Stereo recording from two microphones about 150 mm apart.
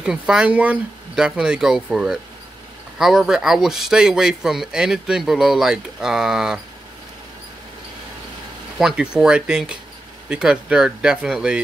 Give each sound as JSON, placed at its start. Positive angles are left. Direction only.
{"t": 0.0, "sound": "speech", "side_deg": -5}
{"t": 8.7, "sound": "speech", "side_deg": -5}